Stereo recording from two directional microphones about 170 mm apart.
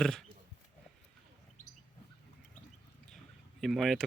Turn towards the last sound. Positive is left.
turn(degrees=0)  # may be behind; listen again after turning